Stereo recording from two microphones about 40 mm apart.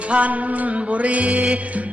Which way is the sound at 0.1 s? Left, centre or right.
Right.